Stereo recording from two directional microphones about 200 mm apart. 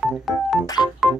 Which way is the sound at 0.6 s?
20° left (ahead or behind).